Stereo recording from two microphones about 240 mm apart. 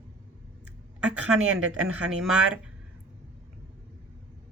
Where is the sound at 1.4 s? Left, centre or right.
Right.